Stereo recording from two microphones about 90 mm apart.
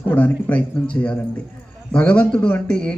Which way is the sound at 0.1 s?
20° left (ahead or behind).